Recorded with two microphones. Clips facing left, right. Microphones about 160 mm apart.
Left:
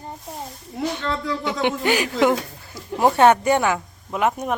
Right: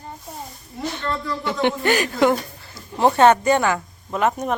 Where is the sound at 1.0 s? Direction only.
90° left.